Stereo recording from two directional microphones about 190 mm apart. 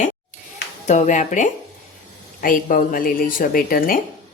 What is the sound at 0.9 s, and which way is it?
Speech, 40° left (ahead or behind).